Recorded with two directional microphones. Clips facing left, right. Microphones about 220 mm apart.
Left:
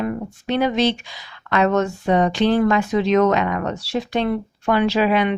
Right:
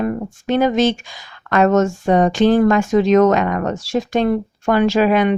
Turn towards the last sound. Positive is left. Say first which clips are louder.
# right 4 dB
turn(degrees=-45)  # may be behind; listen again after turning